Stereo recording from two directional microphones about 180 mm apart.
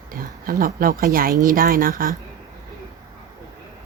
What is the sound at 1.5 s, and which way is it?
Speech, 50° right (ahead or behind).